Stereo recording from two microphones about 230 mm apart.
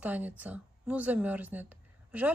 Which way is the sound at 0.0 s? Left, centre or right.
Centre.